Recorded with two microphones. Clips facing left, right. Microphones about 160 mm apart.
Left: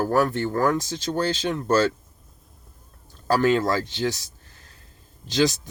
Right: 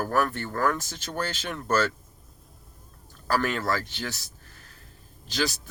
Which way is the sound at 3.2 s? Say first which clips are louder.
Left 6 dB; 20° left (ahead or behind).